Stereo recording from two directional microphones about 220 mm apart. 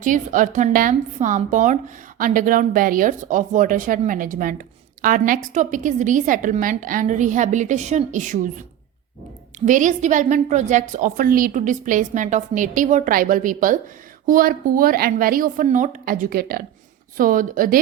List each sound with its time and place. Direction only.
0.0 s a woman's voice: 35° right (ahead or behind)
9.6 s a woman's voice: 35° right (ahead or behind)